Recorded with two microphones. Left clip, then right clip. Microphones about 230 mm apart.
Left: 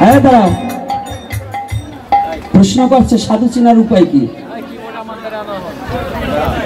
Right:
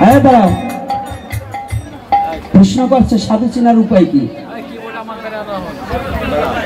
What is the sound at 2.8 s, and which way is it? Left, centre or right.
A man's voice, left.